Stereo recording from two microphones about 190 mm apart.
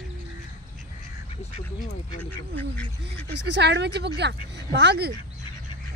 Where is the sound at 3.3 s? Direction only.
65° right (ahead or behind).